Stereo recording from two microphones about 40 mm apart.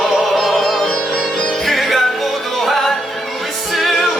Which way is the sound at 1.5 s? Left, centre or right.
Centre.